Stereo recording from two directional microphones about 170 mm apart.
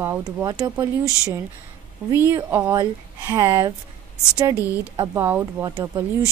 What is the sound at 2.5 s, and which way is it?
Speech, 10° right (ahead or behind).